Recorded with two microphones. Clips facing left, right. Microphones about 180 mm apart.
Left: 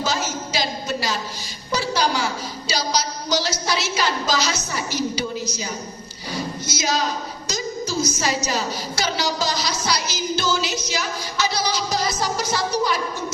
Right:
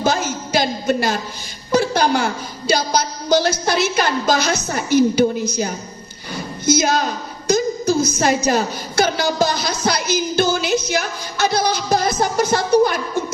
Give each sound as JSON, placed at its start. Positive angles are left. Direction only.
{"t": 0.0, "sound": "music", "side_deg": -55}
{"t": 1.7, "sound": "a woman's voice", "side_deg": -55}